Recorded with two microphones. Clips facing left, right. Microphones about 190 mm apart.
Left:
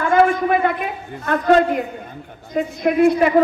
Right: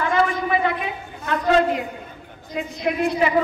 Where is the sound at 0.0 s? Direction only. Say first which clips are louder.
Left 5 dB; 50° left (ahead or behind).